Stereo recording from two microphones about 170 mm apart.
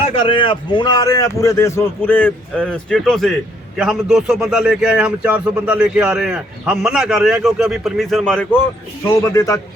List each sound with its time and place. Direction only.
0.2 s a man's voice: 30° left (ahead or behind); by 8.5 s 5° left (ahead or behind)
9.0 s a man's voice: 15° left (ahead or behind)